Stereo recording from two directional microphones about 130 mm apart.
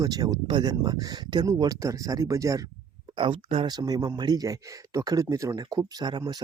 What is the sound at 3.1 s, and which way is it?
Speech, 40° right (ahead or behind).